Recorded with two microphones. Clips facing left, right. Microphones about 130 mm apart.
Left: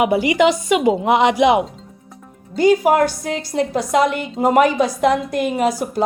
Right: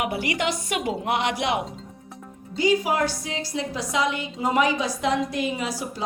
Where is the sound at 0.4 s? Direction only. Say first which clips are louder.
Left 13 dB; 90° left.